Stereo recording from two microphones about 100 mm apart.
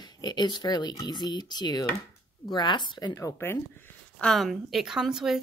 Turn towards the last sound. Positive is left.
turn(degrees=-5)  # may be behind; listen again after turning